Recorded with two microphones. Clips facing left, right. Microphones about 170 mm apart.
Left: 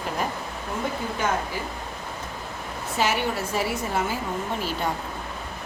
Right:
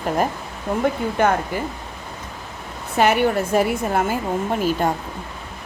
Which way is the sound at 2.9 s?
60° right (ahead or behind).